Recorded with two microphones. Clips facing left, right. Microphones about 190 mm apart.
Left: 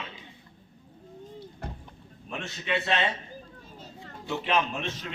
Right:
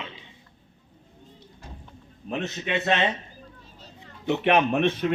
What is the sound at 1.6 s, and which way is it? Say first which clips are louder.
Vehicle: left 5 dB; 60° left (ahead or behind).